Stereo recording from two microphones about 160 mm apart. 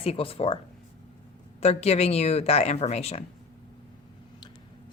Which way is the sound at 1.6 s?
40° left (ahead or behind).